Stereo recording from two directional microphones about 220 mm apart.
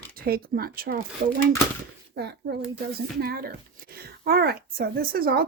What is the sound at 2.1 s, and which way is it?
A child's voice, 50° right (ahead or behind).